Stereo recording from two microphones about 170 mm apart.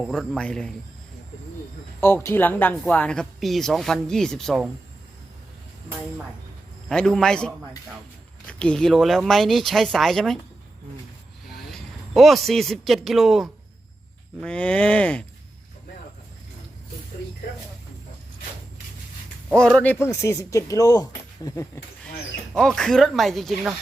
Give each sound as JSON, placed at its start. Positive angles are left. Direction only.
{"t": 0.0, "sound": "speech", "side_deg": 0}
{"t": 2.0, "sound": "speech", "side_deg": 15}
{"t": 6.8, "sound": "speech", "side_deg": 5}
{"t": 11.4, "sound": "speech", "side_deg": 0}
{"t": 19.5, "sound": "speech", "side_deg": 5}
{"t": 22.5, "sound": "speech", "side_deg": 5}